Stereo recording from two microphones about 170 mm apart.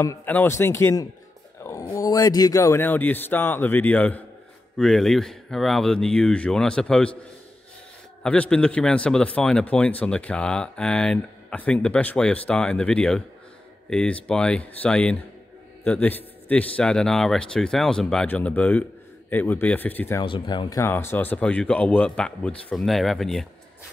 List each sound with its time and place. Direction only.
0.0 s a man's voice: 15° left (ahead or behind)
8.2 s a man's voice: 5° left (ahead or behind)
20.2 s speech: 25° left (ahead or behind)
20.8 s a man's voice: 15° left (ahead or behind)